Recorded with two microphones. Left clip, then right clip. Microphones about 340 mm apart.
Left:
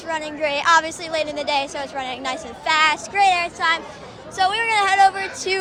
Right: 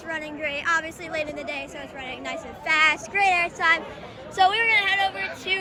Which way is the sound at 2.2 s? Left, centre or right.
Centre.